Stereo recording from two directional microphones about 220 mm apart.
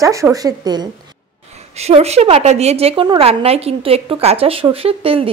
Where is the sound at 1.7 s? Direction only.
30° right (ahead or behind).